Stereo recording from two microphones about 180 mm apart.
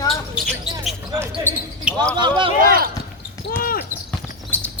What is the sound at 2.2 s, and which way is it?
Speech, 25° right (ahead or behind).